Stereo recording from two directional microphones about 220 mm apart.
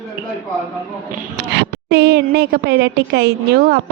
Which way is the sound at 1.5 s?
50° right (ahead or behind).